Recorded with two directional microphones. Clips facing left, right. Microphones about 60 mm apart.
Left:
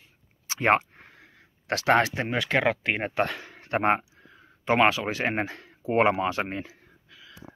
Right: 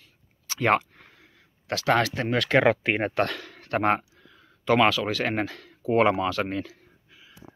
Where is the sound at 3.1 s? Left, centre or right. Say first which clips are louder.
Right 1 dB; centre.